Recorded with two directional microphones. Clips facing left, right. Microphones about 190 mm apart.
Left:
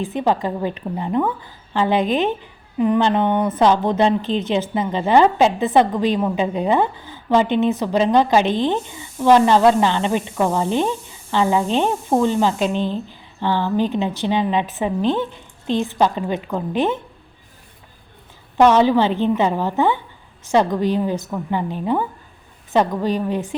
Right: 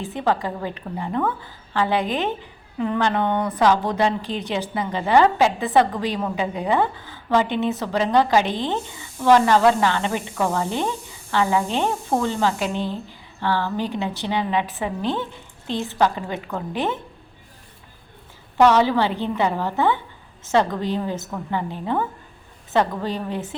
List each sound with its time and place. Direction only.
0.0 s a woman's voice: 20° left (ahead or behind)
18.5 s a woman's voice: 15° left (ahead or behind)